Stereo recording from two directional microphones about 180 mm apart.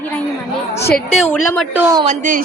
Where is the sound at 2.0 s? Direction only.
45° right (ahead or behind).